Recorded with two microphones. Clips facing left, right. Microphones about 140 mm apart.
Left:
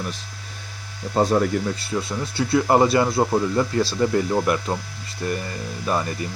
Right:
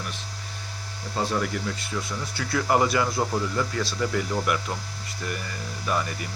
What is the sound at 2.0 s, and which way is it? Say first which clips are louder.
Speech: left 7 dB; 25° left (ahead or behind).